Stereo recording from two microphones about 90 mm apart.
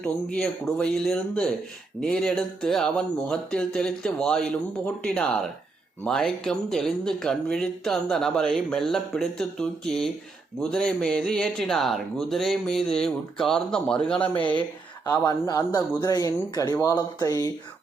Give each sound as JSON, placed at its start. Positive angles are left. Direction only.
{"t": 0.3, "sound": "speech", "side_deg": 5}
{"t": 15.2, "sound": "speech", "side_deg": 40}